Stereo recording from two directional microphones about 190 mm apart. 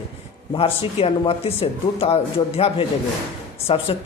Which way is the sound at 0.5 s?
30° left (ahead or behind).